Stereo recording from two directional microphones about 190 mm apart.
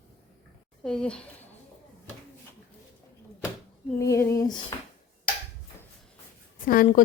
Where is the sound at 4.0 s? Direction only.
15° left (ahead or behind).